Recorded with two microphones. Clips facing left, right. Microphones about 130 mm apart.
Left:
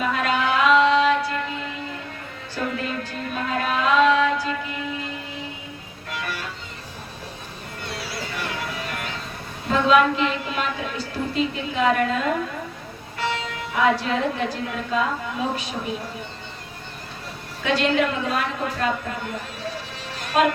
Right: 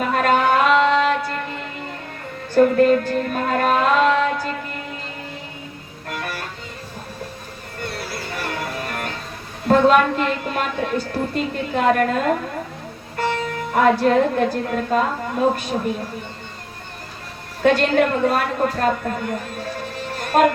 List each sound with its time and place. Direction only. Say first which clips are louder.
0.1 s music: right 9 dB; 45° right (ahead or behind)
2.6 s music: right 14 dB; 50° right (ahead or behind)
6.1 s music: right 2 dB; 50° right (ahead or behind)
7.8 s music: right 3 dB; 50° right (ahead or behind)
9.6 s a woman's voice: right 4 dB; 50° right (ahead or behind)
17.6 s a woman's voice: right 5 dB; 50° right (ahead or behind)
19.5 s music: right 4 dB; 50° right (ahead or behind)